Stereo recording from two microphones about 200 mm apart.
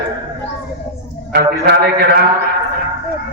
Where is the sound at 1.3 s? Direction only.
50° right (ahead or behind).